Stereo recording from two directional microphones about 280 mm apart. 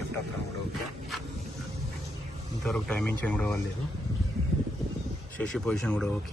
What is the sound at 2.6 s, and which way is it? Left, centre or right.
Speech, centre.